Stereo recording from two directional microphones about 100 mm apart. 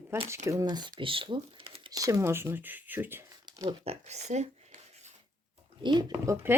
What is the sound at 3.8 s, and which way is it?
Speech, 90° right.